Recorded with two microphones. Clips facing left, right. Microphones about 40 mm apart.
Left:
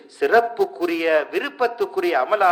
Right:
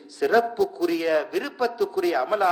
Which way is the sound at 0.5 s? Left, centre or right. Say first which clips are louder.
Left 2 dB; left.